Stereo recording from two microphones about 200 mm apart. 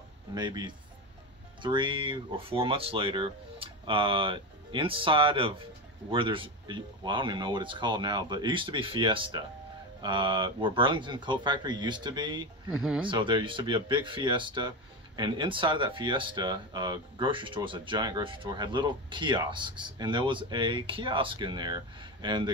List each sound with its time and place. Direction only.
0.3 s speech: 20° right (ahead or behind)
12.7 s speech: 5° right (ahead or behind)
13.0 s speech: 25° right (ahead or behind)